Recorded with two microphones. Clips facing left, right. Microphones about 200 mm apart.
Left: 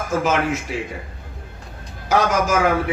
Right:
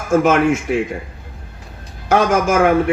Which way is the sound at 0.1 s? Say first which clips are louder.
Right 7 dB; 50° right (ahead or behind).